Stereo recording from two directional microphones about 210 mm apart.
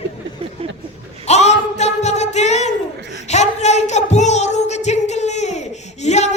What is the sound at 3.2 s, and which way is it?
Speech, 35° left (ahead or behind).